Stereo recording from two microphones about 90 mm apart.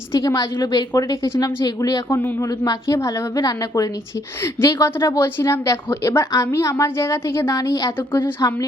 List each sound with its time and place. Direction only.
0.1 s a woman's voice: 40° left (ahead or behind)
2.1 s a woman's voice: 20° left (ahead or behind)
2.4 s a woman's voice: 40° left (ahead or behind)
4.4 s a woman's voice: 30° left (ahead or behind)
7.9 s a woman's voice: 25° left (ahead or behind)
8.4 s a woman's voice: 40° left (ahead or behind)